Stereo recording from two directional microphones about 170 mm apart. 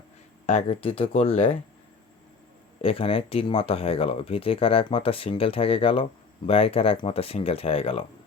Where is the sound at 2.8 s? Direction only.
35° left (ahead or behind).